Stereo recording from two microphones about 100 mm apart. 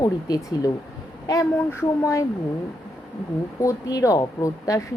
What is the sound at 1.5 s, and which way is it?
Speech, 25° left (ahead or behind).